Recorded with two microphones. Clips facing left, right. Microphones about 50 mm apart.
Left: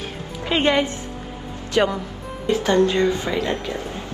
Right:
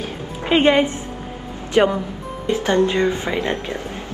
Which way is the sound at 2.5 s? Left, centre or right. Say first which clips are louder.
Even; right.